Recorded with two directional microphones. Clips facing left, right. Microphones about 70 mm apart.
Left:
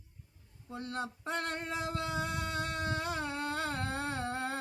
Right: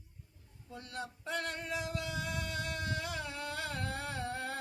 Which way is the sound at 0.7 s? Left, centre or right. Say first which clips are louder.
Left 5 dB; left.